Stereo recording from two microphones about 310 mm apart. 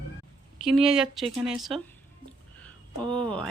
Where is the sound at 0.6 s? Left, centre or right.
Centre.